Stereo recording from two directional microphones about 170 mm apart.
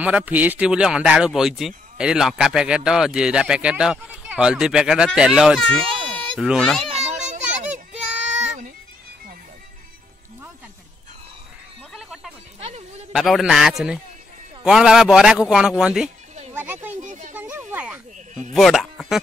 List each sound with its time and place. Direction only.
0.0 s speech: 10° right (ahead or behind)
6.9 s children playing: 40° right (ahead or behind)
11.9 s music: 5° right (ahead or behind)
12.5 s music: 40° right (ahead or behind)
13.1 s speech: centre (ahead or behind)
16.5 s a sound: 10° right (ahead or behind)
16.9 s children playing: 45° right (ahead or behind)
17.4 s a sound: 10° right (ahead or behind)
18.5 s speech: centre (ahead or behind)